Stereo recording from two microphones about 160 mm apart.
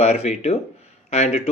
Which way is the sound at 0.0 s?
45° left (ahead or behind).